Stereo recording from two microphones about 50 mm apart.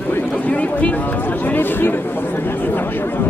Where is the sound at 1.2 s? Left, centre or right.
Left.